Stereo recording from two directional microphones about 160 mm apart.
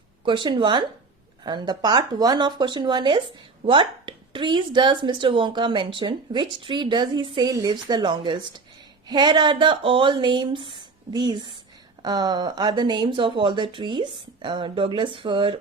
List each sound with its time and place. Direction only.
0.3 s speech: 30° right (ahead or behind)